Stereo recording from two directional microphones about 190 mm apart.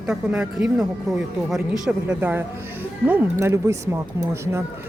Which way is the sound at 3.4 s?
15° right (ahead or behind).